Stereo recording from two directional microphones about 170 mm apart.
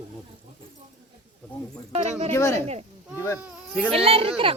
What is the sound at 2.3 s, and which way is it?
Speech, 20° left (ahead or behind).